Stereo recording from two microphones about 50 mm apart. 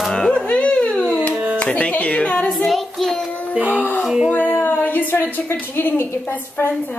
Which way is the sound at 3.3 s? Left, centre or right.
Left.